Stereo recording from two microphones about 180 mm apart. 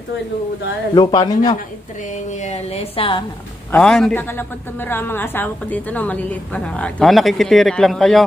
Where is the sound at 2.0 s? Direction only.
40° left (ahead or behind).